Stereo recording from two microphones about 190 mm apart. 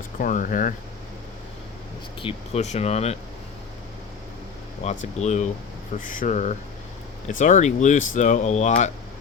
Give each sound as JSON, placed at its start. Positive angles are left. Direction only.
{"t": 0.2, "sound": "speech", "side_deg": 45}
{"t": 2.2, "sound": "speech", "side_deg": 35}
{"t": 4.8, "sound": "speech", "side_deg": 35}